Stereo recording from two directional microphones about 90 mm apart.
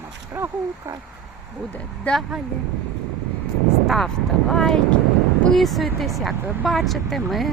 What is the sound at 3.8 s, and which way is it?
Speech, 5° left (ahead or behind).